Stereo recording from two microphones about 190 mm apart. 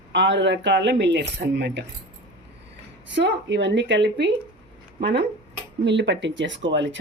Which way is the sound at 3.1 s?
70° right (ahead or behind).